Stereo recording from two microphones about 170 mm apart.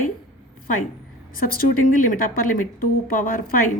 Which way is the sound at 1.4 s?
55° left (ahead or behind).